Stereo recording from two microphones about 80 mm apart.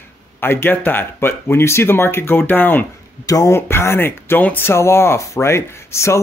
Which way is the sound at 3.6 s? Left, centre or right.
Left.